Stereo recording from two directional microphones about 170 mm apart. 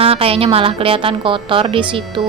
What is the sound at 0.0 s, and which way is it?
A woman's voice, 35° right (ahead or behind).